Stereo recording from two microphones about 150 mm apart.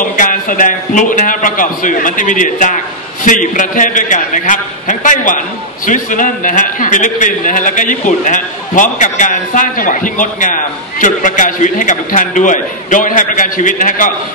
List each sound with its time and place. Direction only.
0.1 s a man's voice: 60° left (ahead or behind)